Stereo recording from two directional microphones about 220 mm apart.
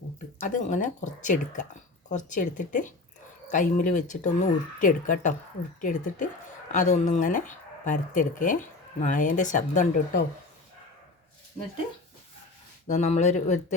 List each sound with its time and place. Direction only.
0.4 s speech: 35° left (ahead or behind)
12.9 s speech: 30° left (ahead or behind)